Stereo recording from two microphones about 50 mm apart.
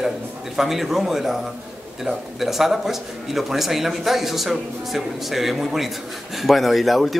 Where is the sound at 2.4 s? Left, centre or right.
Centre.